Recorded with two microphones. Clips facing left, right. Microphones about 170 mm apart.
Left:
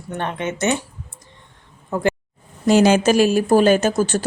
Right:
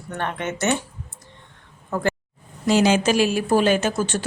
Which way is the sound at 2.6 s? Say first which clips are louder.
Left 4 dB; 50° left (ahead or behind).